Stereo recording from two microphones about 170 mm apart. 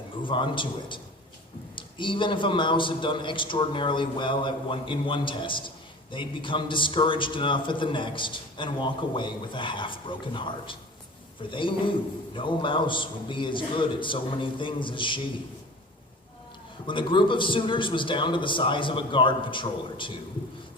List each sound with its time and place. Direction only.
0.2 s a man's voice: 30° left (ahead or behind)
16.8 s a man's voice: 30° left (ahead or behind)